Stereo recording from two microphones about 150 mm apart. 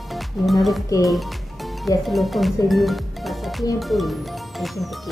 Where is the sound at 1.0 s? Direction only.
Centre (ahead or behind).